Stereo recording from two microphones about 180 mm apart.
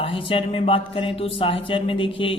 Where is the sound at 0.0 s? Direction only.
30° left (ahead or behind).